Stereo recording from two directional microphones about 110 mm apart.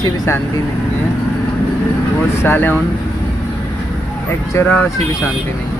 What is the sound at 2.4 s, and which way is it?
Speech, 20° left (ahead or behind).